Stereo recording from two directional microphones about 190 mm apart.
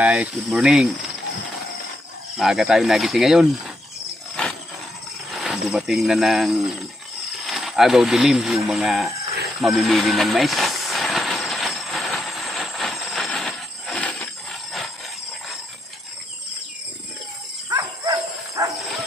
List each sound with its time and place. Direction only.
0.0 s speech: 5° right (ahead or behind)
2.3 s speech: centre (ahead or behind)
5.3 s speech: centre (ahead or behind)
9.6 s train: centre (ahead or behind)
17.6 s dog: 15° right (ahead or behind)